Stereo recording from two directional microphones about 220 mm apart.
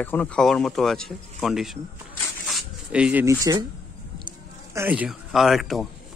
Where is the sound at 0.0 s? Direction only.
10° left (ahead or behind).